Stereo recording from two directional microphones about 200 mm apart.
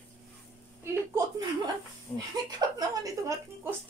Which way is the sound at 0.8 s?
15° right (ahead or behind).